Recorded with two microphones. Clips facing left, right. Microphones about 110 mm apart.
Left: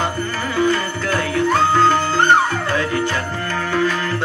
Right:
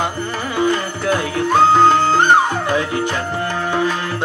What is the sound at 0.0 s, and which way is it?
Music, 15° right (ahead or behind).